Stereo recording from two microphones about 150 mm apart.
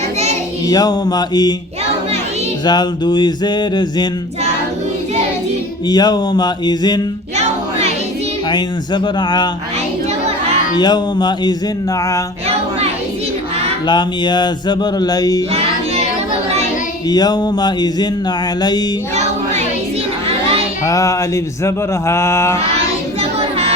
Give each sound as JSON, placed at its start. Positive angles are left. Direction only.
{"t": 0.7, "sound": "speech", "side_deg": 25}
{"t": 2.6, "sound": "speech", "side_deg": 30}
{"t": 5.9, "sound": "speech", "side_deg": 25}
{"t": 7.3, "sound": "music", "side_deg": -45}
{"t": 8.4, "sound": "speech", "side_deg": 30}
{"t": 10.8, "sound": "speech", "side_deg": 30}
{"t": 13.8, "sound": "speech", "side_deg": 30}
{"t": 17.1, "sound": "speech", "side_deg": 25}
{"t": 19.1, "sound": "a sound", "side_deg": -50}
{"t": 20.8, "sound": "speech", "side_deg": 20}